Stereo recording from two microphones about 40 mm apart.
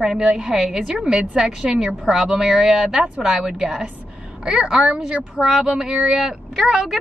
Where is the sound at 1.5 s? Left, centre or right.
Centre.